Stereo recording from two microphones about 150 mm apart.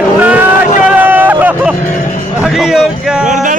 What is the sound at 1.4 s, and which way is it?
Vehicle, 10° right (ahead or behind).